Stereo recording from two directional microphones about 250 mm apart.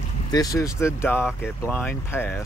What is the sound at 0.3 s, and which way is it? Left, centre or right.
Speech, centre.